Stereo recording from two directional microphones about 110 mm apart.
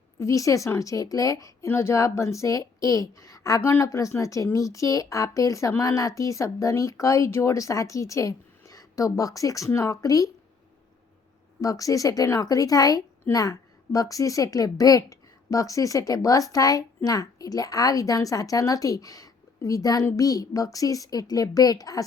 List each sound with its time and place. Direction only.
0.2 s a woman's voice: 30° left (ahead or behind)
11.6 s a woman's voice: 30° left (ahead or behind)